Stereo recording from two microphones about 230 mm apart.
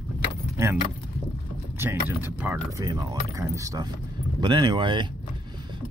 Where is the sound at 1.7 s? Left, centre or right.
Centre.